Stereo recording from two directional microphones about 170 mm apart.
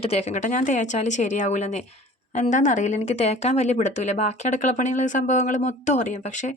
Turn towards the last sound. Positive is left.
turn(degrees=45)  # may be behind; listen again after turning